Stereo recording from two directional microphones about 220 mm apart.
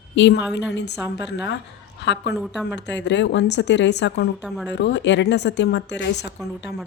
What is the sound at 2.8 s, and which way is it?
Speech, 50° left (ahead or behind).